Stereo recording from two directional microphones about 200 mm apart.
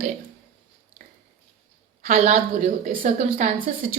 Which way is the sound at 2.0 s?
40° right (ahead or behind).